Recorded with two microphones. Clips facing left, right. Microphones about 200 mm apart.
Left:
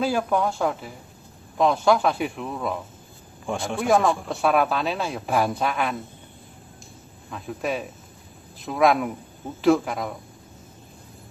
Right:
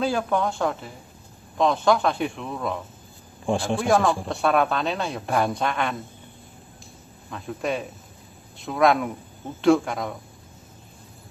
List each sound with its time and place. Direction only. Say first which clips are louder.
0.0 s speech: left 1 dB; 5° left (ahead or behind)
3.5 s a man's voice: right 5 dB; 30° right (ahead or behind)
3.8 s speech: left 3 dB; centre (ahead or behind)
7.2 s speech: even; centre (ahead or behind)